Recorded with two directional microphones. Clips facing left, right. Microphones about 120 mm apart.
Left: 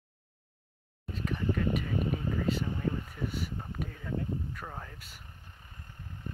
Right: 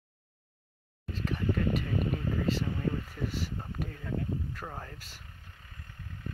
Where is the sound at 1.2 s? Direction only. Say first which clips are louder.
Even; centre (ahead or behind).